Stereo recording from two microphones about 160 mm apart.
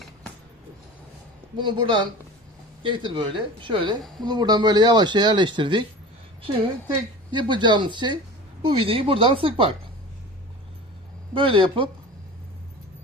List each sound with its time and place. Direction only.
1.5 s a woman's voice: 30° right (ahead or behind)
11.3 s a woman's voice: 30° right (ahead or behind)